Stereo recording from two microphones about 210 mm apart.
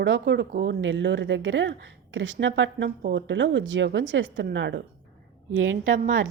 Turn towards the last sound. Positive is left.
turn(degrees=-65)  # may be behind; listen again after turning